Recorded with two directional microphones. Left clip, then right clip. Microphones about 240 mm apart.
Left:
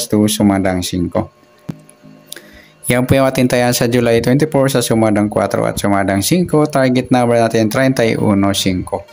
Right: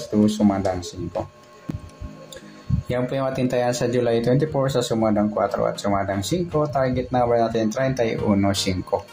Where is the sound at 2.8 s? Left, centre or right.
Left; by 9.0 s centre.